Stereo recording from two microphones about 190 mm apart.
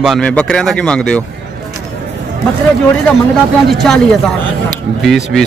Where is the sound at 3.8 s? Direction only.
Centre (ahead or behind).